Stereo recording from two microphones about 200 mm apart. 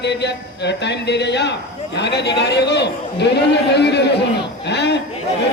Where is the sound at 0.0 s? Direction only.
60° left (ahead or behind).